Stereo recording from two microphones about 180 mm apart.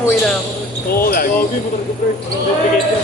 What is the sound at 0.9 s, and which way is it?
Speech, 55° left (ahead or behind).